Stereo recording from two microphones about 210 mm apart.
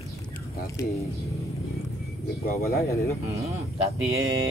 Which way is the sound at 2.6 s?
45° left (ahead or behind).